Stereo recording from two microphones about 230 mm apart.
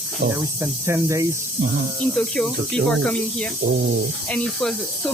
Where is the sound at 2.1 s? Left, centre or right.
Centre.